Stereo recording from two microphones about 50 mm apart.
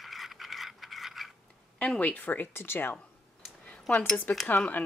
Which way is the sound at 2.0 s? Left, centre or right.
Left.